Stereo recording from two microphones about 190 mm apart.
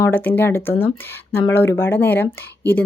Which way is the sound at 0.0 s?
10° left (ahead or behind).